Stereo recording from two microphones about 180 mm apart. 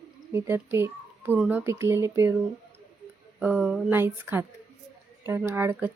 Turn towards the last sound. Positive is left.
turn(degrees=-15)  # may be behind; listen again after turning